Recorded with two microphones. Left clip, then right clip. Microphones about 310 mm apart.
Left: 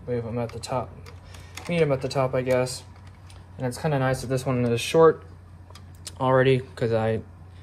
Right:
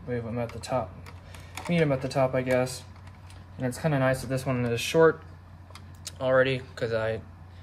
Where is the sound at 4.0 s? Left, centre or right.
Centre.